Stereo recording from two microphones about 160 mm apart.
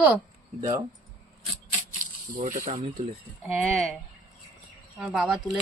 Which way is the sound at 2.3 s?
55° right (ahead or behind).